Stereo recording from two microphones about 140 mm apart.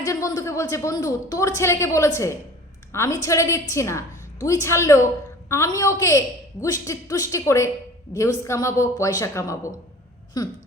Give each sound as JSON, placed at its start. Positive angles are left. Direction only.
{"t": 0.0, "sound": "a woman's voice", "side_deg": 25}